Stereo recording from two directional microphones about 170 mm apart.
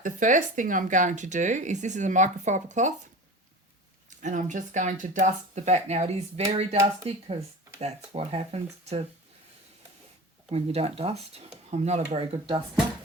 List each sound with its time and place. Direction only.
0.0 s speech: 50° right (ahead or behind)
4.2 s speech: 45° right (ahead or behind)
10.5 s speech: 35° right (ahead or behind)